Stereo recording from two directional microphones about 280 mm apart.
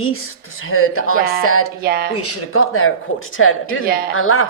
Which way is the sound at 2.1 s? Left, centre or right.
Left.